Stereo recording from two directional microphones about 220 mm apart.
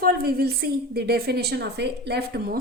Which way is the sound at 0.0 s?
45° right (ahead or behind).